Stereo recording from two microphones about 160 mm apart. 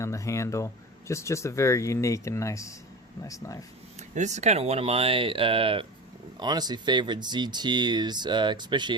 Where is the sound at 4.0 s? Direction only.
45° right (ahead or behind).